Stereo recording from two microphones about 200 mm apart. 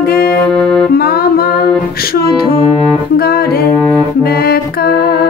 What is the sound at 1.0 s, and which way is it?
Music, 50° left (ahead or behind).